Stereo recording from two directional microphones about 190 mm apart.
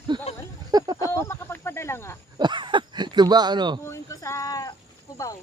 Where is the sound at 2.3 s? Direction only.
25° right (ahead or behind).